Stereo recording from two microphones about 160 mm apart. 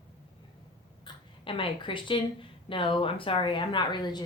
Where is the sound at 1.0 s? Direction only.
35° left (ahead or behind).